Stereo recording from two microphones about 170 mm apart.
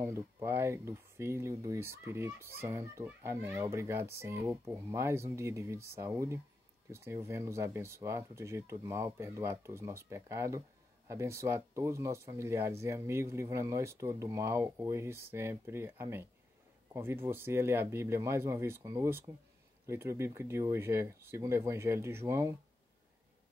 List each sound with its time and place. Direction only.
0.0 s speech: 15° right (ahead or behind)